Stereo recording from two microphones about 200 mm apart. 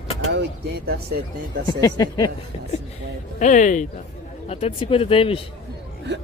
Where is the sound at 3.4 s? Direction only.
40° left (ahead or behind).